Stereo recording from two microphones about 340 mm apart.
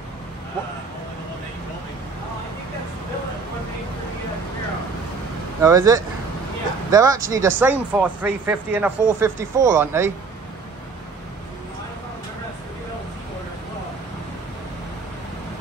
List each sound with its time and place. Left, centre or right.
5.6 s speech: centre